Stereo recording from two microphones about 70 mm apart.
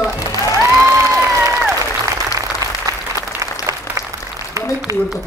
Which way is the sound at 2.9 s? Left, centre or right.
Right.